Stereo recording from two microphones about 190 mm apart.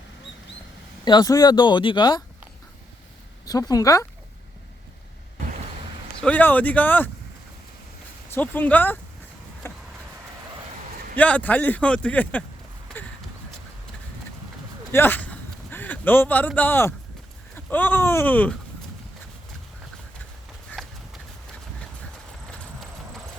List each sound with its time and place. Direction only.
1.0 s speech: 20° left (ahead or behind)
3.4 s speech: 20° left (ahead or behind)
6.1 s speech: 10° left (ahead or behind)
8.3 s speech: 10° left (ahead or behind)
9.6 s vehicle: 15° left (ahead or behind)
11.2 s speech: 10° left (ahead or behind)
14.9 s a sound: 10° left (ahead or behind)
16.6 s speech: 10° left (ahead or behind)
20.7 s horse: centre (ahead or behind)
22.4 s train: 5° left (ahead or behind)